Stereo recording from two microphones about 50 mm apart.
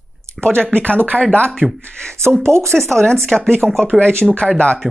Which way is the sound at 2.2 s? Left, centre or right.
Centre.